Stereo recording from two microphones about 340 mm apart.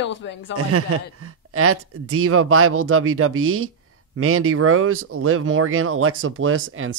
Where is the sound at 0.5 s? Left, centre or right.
Right.